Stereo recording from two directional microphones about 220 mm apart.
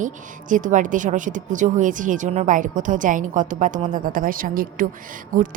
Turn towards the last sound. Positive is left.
turn(degrees=-40)  # may be behind; listen again after turning